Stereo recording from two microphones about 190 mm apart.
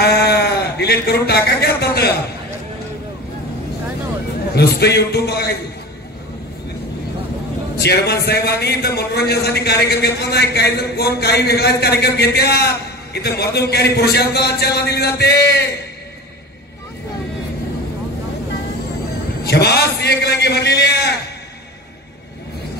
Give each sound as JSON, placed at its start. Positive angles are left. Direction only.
{"t": 0.0, "sound": "sheep", "side_deg": 60}
{"t": 4.6, "sound": "a man's voice", "side_deg": 60}
{"t": 7.7, "sound": "a man's voice", "side_deg": 60}
{"t": 19.4, "sound": "a man's voice", "side_deg": 60}